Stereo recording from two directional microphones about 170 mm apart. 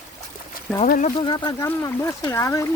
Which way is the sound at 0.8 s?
60° left (ahead or behind).